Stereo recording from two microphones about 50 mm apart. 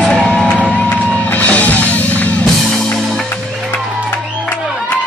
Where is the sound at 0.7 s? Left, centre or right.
Left.